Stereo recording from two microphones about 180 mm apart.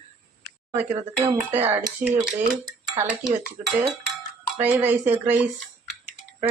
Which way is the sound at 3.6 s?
Centre (ahead or behind).